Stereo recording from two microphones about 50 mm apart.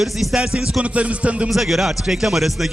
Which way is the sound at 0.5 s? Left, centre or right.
Right.